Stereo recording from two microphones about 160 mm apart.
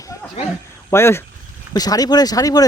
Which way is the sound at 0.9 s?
15° left (ahead or behind).